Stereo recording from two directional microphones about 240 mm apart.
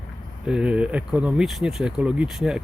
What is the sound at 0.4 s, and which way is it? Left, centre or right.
Speech, centre.